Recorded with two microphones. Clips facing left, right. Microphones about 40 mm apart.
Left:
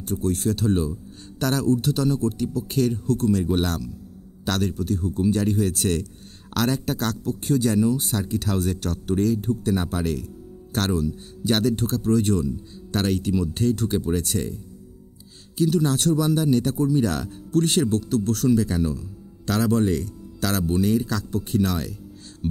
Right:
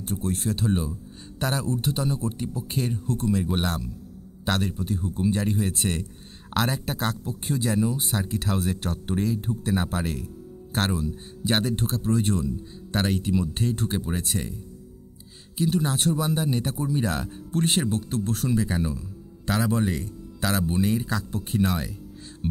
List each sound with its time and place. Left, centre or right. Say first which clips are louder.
0.0 s a man's voice: left 4 dB; right
22.4 s music: left 2 dB; centre